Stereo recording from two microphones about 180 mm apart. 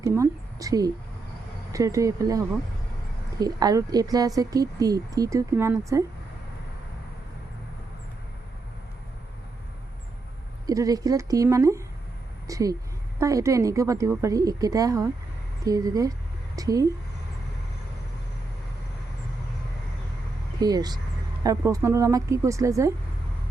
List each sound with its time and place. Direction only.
0.0 s a woman's voice: 15° right (ahead or behind)
3.4 s speech: 20° right (ahead or behind)
10.7 s a woman's voice: 20° right (ahead or behind)
20.6 s a woman's voice: 20° right (ahead or behind)